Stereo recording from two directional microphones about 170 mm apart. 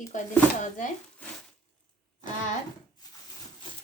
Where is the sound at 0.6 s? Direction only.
50° left (ahead or behind).